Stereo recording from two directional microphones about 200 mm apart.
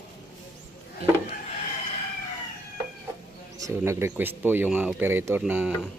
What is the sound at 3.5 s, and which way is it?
Speech, 15° right (ahead or behind).